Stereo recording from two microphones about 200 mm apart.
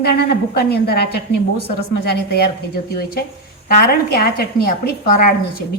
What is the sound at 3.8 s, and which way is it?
A woman's voice, 50° left (ahead or behind).